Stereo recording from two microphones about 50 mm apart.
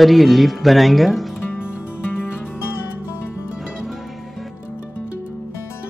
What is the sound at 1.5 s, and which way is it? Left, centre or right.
Music, left.